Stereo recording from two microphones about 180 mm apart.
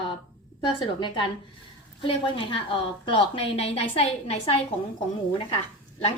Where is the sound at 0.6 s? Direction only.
25° left (ahead or behind).